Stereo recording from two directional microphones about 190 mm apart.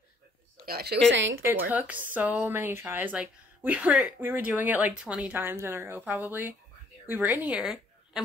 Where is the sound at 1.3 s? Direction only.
15° right (ahead or behind).